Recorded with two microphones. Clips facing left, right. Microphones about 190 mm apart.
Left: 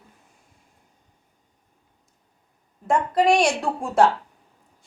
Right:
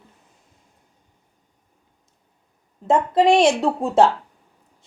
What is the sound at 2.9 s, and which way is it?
A woman's voice, 20° right (ahead or behind).